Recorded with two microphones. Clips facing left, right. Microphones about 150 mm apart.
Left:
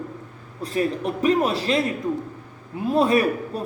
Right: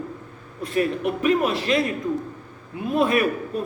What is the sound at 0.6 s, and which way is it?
Speech, 35° left (ahead or behind).